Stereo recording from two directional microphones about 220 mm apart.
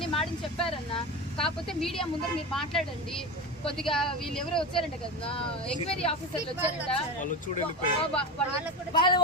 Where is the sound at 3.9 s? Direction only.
Centre (ahead or behind).